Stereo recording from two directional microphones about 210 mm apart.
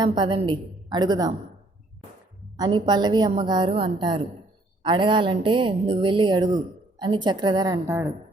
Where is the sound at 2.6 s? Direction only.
20° right (ahead or behind).